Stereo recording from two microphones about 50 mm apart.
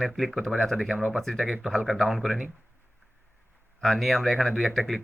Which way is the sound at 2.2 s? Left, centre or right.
Centre.